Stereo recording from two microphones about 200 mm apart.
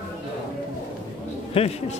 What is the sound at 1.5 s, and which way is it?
Speech, 30° left (ahead or behind).